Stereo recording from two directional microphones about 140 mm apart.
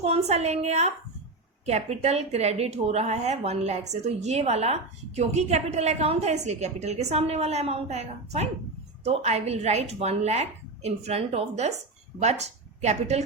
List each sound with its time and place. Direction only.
0.0 s a woman's voice: 50° right (ahead or behind)